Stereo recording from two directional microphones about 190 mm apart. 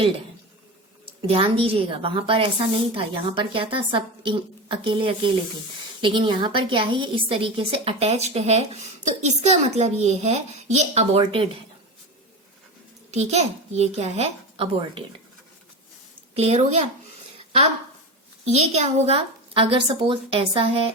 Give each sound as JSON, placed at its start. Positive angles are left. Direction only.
{"t": 1.3, "sound": "a woman's voice", "side_deg": -30}
{"t": 13.1, "sound": "a woman's voice", "side_deg": -35}
{"t": 16.3, "sound": "a woman's voice", "side_deg": -35}
{"t": 18.4, "sound": "a woman's voice", "side_deg": -35}